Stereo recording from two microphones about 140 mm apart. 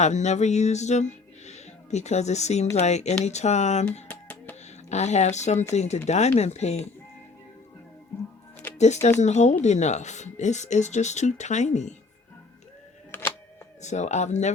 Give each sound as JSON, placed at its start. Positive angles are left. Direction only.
{"t": 0.0, "sound": "speech", "side_deg": 55}
{"t": 4.1, "sound": "music", "side_deg": 10}
{"t": 4.9, "sound": "speech", "side_deg": 55}
{"t": 8.8, "sound": "speech", "side_deg": 55}
{"t": 13.1, "sound": "music", "side_deg": 15}
{"t": 13.8, "sound": "speech", "side_deg": 55}